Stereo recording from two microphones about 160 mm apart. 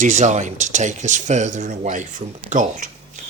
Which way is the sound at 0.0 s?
50° right (ahead or behind).